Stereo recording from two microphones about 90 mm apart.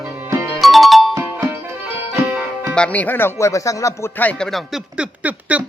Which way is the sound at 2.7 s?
15° left (ahead or behind).